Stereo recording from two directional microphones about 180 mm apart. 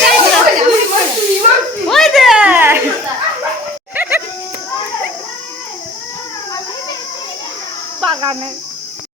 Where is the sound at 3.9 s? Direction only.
10° right (ahead or behind).